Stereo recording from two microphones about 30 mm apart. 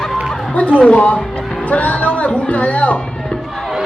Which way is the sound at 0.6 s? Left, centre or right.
Left.